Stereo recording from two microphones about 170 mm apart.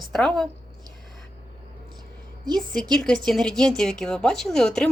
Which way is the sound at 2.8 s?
5° left (ahead or behind).